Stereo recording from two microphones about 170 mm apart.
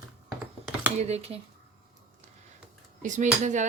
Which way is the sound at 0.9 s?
40° right (ahead or behind).